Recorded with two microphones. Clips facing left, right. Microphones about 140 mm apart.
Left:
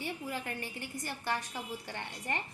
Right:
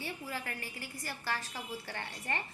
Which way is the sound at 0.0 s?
20° left (ahead or behind).